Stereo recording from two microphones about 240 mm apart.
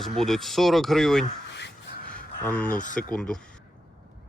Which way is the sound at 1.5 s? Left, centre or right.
Left.